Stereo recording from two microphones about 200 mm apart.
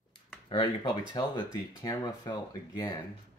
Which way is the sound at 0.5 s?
25° left (ahead or behind).